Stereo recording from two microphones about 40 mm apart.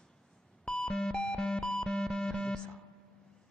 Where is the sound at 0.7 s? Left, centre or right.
Left.